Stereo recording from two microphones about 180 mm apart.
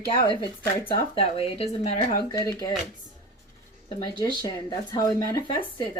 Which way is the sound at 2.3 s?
20° left (ahead or behind).